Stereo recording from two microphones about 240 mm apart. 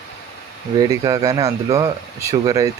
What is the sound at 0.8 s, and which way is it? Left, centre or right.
Speech, centre.